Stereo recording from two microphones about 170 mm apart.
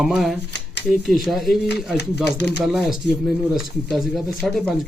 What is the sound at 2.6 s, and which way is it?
Speech, centre (ahead or behind).